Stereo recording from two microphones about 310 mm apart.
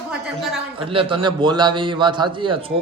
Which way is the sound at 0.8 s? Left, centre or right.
Centre.